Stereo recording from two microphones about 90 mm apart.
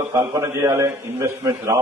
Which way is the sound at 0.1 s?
35° right (ahead or behind).